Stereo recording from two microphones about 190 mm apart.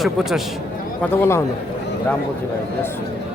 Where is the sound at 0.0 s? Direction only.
Centre (ahead or behind).